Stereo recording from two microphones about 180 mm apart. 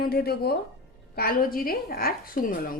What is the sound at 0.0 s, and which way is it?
A woman's voice, 60° left (ahead or behind).